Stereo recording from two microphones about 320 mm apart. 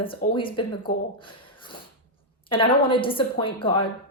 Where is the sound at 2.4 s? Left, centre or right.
Centre.